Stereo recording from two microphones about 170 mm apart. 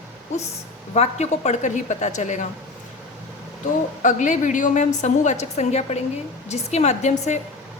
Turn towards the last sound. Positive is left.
turn(degrees=40)  # may be behind; listen again after turning